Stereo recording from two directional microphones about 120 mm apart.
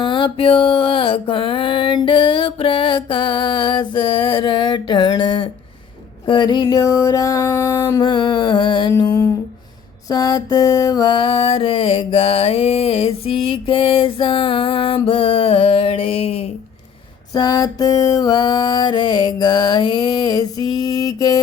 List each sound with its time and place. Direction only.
0.0 s mantra: 45° left (ahead or behind)
6.2 s a sound: 40° left (ahead or behind)
8.0 s music: 40° left (ahead or behind)
9.1 s a sound: 25° left (ahead or behind)
10.1 s mantra: 30° left (ahead or behind); by 16.5 s 55° left (ahead or behind)
17.3 s music: 30° left (ahead or behind)